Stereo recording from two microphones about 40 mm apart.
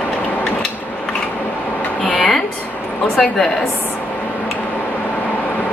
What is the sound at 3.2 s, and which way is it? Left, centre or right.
Speech, centre.